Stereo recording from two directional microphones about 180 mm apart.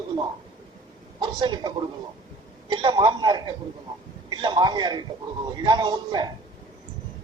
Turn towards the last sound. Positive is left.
turn(degrees=-25)  # may be behind; listen again after turning